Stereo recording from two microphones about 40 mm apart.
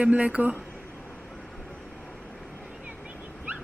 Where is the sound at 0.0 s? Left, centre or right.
Right.